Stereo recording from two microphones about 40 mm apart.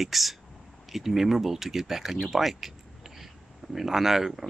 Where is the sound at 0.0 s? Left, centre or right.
Centre.